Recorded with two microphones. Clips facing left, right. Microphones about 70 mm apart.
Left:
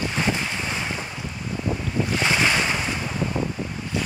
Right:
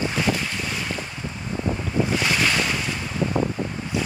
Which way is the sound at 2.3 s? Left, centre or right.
Centre.